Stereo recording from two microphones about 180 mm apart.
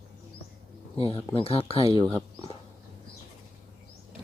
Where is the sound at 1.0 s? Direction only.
30° left (ahead or behind).